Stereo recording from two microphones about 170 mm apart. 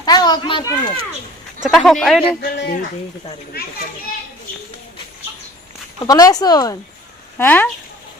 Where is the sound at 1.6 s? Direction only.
Centre (ahead or behind).